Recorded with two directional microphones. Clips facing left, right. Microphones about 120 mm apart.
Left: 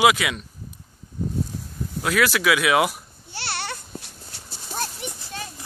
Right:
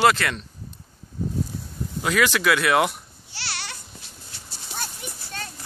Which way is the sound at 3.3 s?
55° left (ahead or behind).